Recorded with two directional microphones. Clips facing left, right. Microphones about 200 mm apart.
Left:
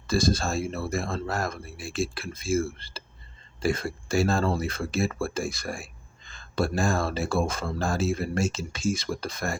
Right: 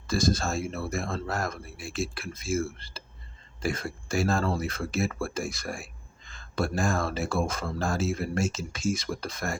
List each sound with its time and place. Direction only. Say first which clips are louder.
0.1 s speech: left 2 dB; 30° left (ahead or behind)